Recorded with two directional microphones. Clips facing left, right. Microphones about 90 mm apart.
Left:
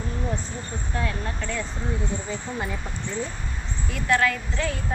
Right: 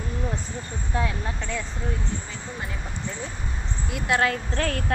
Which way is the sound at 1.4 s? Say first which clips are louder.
Left 1 dB; centre (ahead or behind).